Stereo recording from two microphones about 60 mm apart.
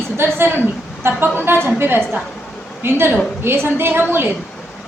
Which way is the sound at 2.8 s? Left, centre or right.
Right.